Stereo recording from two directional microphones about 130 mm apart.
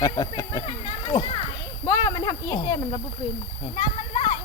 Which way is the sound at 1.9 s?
25° left (ahead or behind).